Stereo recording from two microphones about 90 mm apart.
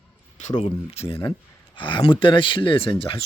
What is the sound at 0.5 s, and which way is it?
Speech, 90° left.